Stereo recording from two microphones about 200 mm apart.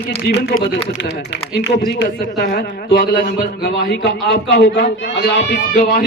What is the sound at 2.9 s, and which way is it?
A man's voice, 55° left (ahead or behind).